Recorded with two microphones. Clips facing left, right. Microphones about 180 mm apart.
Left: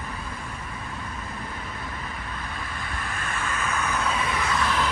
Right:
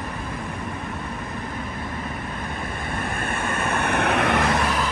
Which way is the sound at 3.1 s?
55° right (ahead or behind).